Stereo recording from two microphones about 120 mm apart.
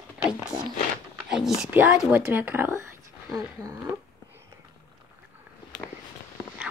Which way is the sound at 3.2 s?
30° right (ahead or behind).